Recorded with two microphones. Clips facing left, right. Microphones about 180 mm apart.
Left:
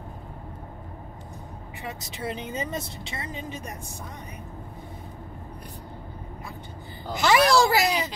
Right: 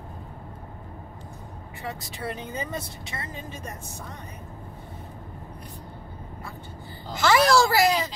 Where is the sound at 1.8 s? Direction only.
20° left (ahead or behind).